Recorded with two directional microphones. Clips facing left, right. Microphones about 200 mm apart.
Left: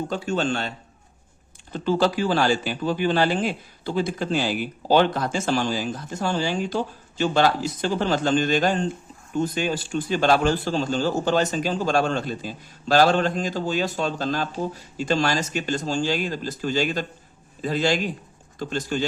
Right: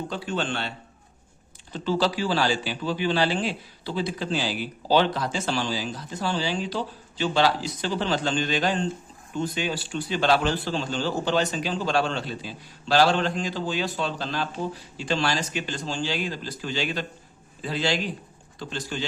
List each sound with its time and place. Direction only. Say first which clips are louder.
0.1 s a man's voice: left 5 dB; 45° left (ahead or behind)
1.7 s a man's voice: left 3 dB; 50° left (ahead or behind)